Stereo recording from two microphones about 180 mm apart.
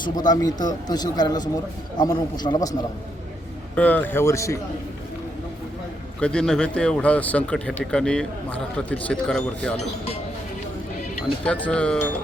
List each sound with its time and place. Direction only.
0.0 s a man's voice: 20° left (ahead or behind)
3.8 s speech: 10° left (ahead or behind)
6.1 s a man's voice: 5° left (ahead or behind)
11.4 s a man's voice: 5° left (ahead or behind)